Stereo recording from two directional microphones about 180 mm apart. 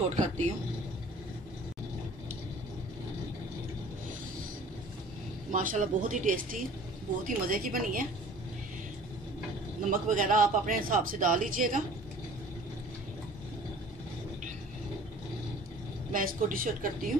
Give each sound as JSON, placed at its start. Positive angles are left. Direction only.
{"t": 0.1, "sound": "speech", "side_deg": -40}
{"t": 5.5, "sound": "a man's voice", "side_deg": -45}
{"t": 9.8, "sound": "a man's voice", "side_deg": -50}
{"t": 16.1, "sound": "a man's voice", "side_deg": -50}